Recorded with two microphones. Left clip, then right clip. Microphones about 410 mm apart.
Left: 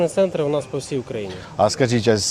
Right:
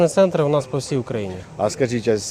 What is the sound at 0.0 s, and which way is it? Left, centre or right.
Speech, right.